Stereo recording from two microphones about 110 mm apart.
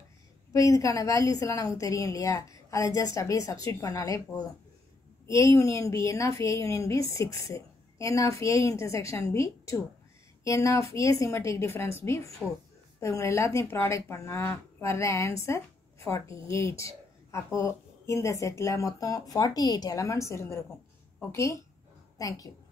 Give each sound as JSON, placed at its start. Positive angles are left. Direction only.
{"t": 0.5, "sound": "a woman's voice", "side_deg": 30}
{"t": 5.2, "sound": "a woman's voice", "side_deg": 25}